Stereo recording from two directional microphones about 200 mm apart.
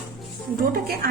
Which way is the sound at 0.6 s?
50° right (ahead or behind).